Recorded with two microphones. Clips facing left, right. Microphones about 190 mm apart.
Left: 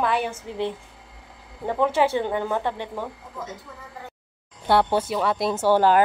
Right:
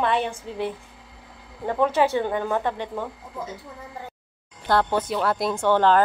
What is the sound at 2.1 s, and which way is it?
Speech, 15° left (ahead or behind).